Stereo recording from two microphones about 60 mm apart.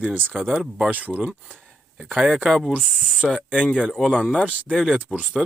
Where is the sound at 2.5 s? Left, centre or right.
Centre.